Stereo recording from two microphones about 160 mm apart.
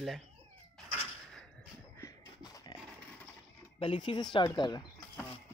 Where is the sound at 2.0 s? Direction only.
25° left (ahead or behind).